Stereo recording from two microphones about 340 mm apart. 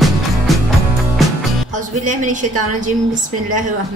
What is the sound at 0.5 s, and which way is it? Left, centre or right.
Music, centre.